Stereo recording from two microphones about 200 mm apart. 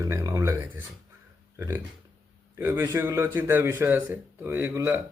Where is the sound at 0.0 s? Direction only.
15° right (ahead or behind).